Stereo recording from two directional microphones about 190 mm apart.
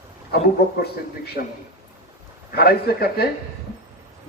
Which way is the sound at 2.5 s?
55° left (ahead or behind).